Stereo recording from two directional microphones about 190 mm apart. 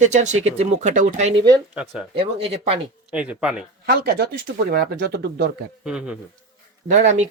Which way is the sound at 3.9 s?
55° right (ahead or behind).